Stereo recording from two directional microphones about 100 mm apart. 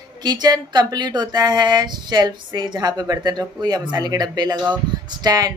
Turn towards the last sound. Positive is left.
turn(degrees=-40)  # may be behind; listen again after turning